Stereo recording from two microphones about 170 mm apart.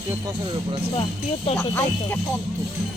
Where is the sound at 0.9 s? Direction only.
35° left (ahead or behind).